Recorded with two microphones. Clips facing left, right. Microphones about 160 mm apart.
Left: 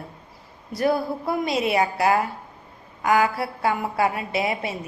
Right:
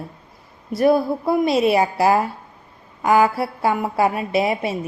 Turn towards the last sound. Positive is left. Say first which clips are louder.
# right 5 dB
turn(degrees=-25)  # may be behind; listen again after turning